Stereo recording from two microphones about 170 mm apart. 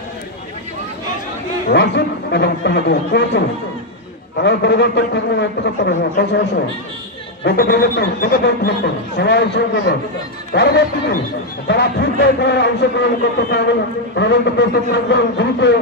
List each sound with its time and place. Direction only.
1.7 s a man's voice: 85° left
7.4 s speech: 60° left (ahead or behind); by 9.9 s 90° left
10.5 s speech: 75° left (ahead or behind); by 13.0 s 90° left
14.1 s a man's voice: 90° left